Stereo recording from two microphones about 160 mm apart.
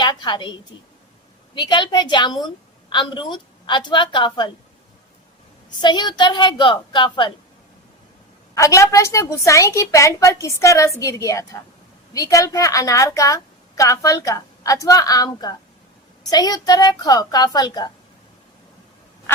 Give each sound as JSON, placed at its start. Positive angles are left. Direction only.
{"t": 0.0, "sound": "a woman's voice", "side_deg": 30}
{"t": 1.5, "sound": "a woman's voice", "side_deg": 30}
{"t": 5.8, "sound": "a woman's voice", "side_deg": 25}
{"t": 8.5, "sound": "a woman's voice", "side_deg": 20}